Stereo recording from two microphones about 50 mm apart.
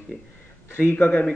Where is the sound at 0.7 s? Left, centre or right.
Left.